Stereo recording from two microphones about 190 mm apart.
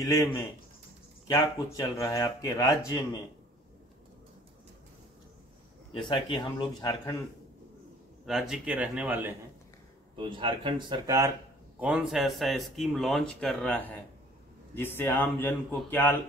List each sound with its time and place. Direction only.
0.0 s speech: 15° left (ahead or behind)
5.9 s speech: 25° left (ahead or behind)
8.3 s speech: centre (ahead or behind)
10.1 s speech: 25° right (ahead or behind)
11.8 s speech: 5° right (ahead or behind)